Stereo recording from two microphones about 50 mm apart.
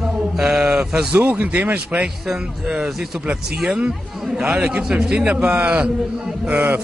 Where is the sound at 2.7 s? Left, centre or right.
Centre.